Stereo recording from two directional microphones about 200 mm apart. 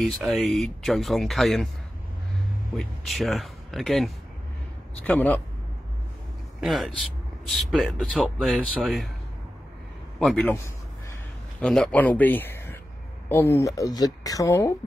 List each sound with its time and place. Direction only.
0.0 s speech: centre (ahead or behind)
2.7 s speech: centre (ahead or behind)
6.6 s speech: centre (ahead or behind)
10.1 s speech: centre (ahead or behind)